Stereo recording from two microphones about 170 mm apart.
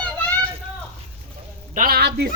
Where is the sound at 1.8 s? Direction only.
60° right (ahead or behind).